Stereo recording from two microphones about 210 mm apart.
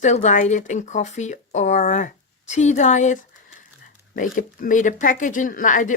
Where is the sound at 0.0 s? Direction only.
35° left (ahead or behind).